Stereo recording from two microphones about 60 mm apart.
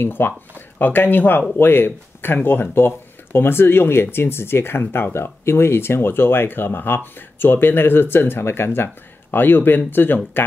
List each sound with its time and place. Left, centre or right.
0.0 s speech: left